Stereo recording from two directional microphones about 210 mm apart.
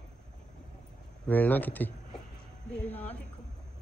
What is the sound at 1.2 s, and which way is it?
Speech, 10° left (ahead or behind).